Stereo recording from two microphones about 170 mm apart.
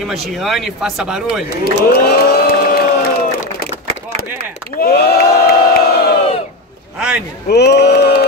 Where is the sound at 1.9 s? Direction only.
70° left (ahead or behind).